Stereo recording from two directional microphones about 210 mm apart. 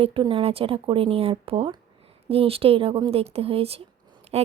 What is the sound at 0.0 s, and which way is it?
A woman's voice, 25° right (ahead or behind).